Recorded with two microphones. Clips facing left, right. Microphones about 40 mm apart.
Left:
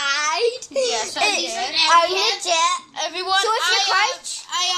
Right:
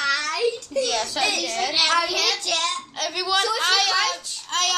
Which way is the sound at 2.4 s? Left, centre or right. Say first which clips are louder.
Left 6 dB; left.